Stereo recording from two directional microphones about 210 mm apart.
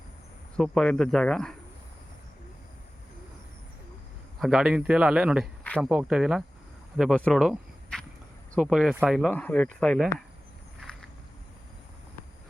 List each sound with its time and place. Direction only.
0.5 s a man's voice: centre (ahead or behind)
4.4 s a man's voice: centre (ahead or behind)
10.8 s a sound: centre (ahead or behind)